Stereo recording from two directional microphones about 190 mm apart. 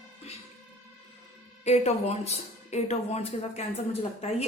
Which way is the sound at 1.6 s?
35° left (ahead or behind).